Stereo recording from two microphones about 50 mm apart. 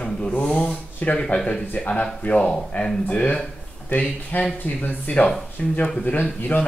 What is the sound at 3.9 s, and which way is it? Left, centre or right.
Speech, left.